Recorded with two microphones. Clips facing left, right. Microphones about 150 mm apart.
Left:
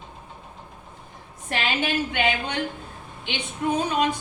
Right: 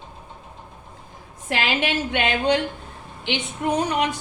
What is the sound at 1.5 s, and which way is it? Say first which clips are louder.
A woman's voice: right 2 dB; 80° right.